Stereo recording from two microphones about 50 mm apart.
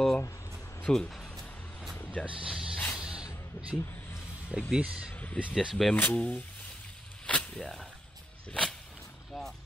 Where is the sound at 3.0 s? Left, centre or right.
Centre.